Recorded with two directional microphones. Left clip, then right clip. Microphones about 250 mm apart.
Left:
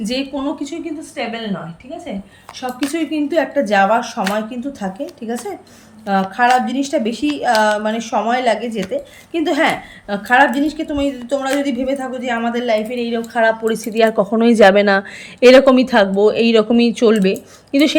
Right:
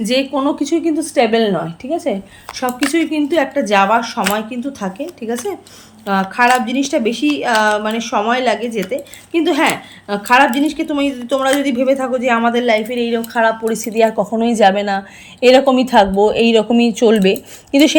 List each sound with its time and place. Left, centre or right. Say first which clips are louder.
0.0 s a woman's voice: right 6 dB; centre
2.6 s a woman's voice: right 5 dB; centre